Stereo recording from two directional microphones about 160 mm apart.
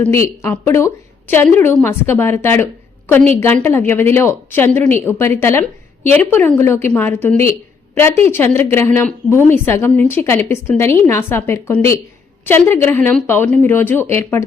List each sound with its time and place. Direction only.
0.0 s a woman's voice: 15° left (ahead or behind)